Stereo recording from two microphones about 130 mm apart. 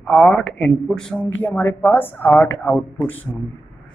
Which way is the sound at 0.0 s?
5° left (ahead or behind).